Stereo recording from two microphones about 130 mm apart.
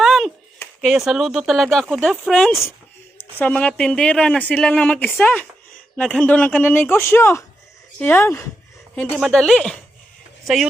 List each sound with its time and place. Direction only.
0.0 s a sound: centre (ahead or behind)
0.8 s speech: centre (ahead or behind)
3.2 s speech: 15° left (ahead or behind)
9.1 s speech: 5° left (ahead or behind)